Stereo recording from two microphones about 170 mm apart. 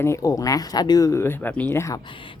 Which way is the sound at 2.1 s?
30° left (ahead or behind).